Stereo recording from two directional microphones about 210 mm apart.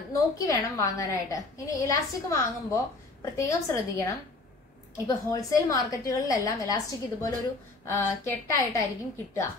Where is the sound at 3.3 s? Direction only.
15° left (ahead or behind).